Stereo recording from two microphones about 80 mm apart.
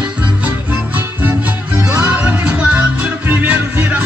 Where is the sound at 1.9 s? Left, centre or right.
Centre.